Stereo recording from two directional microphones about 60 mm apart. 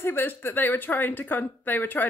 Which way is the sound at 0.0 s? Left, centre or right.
Left.